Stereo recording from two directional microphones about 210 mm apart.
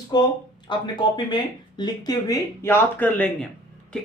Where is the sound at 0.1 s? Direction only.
20° left (ahead or behind).